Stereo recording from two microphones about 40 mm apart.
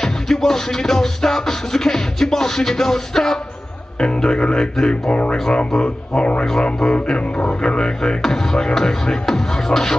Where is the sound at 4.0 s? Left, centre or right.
Left.